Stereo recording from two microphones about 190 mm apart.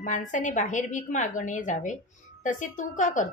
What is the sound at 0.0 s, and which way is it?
A woman's voice, 40° left (ahead or behind).